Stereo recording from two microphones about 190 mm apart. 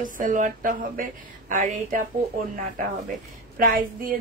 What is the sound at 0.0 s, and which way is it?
A woman's voice, 45° right (ahead or behind).